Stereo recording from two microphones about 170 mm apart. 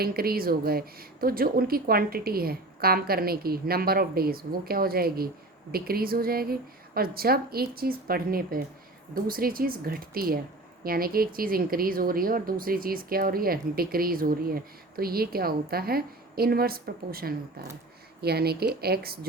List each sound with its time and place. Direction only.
0.0 s speech: 60° right (ahead or behind)